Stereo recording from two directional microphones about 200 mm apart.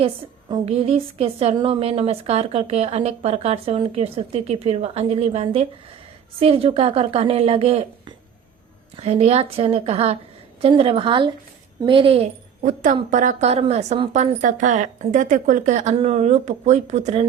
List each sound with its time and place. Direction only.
0.5 s a woman's voice: 30° right (ahead or behind)
12.6 s a woman's voice: 40° right (ahead or behind)